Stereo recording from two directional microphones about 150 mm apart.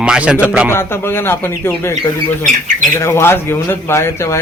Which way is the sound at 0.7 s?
15° left (ahead or behind).